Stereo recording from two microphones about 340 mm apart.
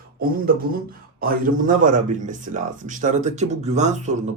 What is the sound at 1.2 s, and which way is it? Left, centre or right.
Speech, right.